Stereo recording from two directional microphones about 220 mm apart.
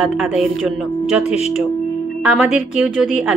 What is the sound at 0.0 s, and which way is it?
A woman's voice, centre (ahead or behind).